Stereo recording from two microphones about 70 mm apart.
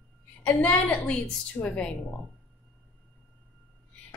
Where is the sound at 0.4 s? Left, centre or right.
Centre.